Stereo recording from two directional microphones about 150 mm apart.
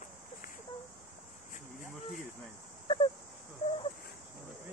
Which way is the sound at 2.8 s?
35° left (ahead or behind).